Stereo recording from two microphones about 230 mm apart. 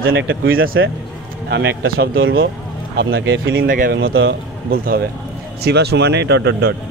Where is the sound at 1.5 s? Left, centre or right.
Right.